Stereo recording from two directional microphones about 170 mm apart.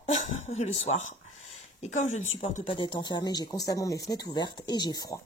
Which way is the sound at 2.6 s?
30° left (ahead or behind).